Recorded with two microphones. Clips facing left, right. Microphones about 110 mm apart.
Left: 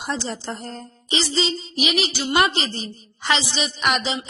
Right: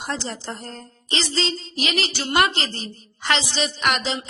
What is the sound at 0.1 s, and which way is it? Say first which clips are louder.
A woman's voice: left 3 dB; 10° left (ahead or behind).